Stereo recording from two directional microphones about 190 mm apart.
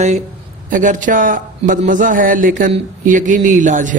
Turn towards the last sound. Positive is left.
turn(degrees=-40)  # may be behind; listen again after turning